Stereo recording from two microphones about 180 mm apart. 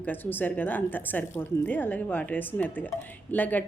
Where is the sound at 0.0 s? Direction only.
10° left (ahead or behind).